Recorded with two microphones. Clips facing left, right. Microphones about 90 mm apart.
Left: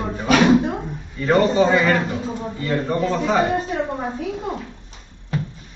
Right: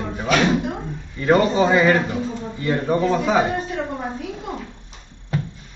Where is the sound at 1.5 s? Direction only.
5° right (ahead or behind).